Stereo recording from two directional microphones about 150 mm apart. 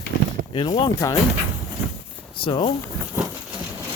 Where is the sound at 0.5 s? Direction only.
30° left (ahead or behind).